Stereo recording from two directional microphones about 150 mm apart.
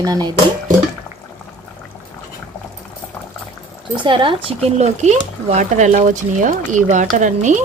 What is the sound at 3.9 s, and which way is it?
Speech, 35° right (ahead or behind).